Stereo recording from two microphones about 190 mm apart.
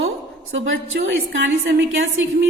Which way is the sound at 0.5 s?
90° right.